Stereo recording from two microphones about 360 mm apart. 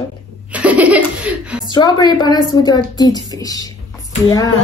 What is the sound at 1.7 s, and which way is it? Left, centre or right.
A woman's voice, centre.